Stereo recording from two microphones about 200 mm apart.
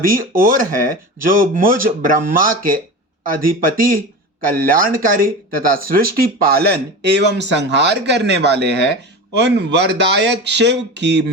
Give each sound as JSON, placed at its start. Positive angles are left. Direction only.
{"t": 0.0, "sound": "speech", "side_deg": -45}